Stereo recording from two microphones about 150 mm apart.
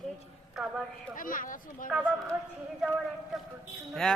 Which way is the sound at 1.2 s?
65° left (ahead or behind).